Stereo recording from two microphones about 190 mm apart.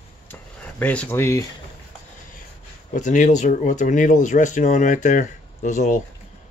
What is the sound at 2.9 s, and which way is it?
Speech, 40° left (ahead or behind).